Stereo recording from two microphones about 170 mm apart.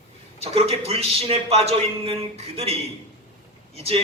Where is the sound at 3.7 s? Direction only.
35° right (ahead or behind).